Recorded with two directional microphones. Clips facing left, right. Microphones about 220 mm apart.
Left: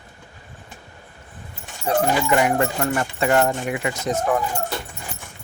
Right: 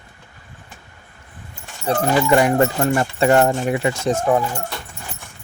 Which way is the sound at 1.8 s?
35° right (ahead or behind).